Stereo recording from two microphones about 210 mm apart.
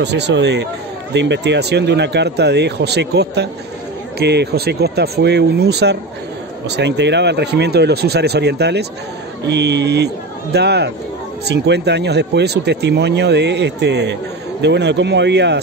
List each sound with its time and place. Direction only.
0.0 s speech: 55° right (ahead or behind)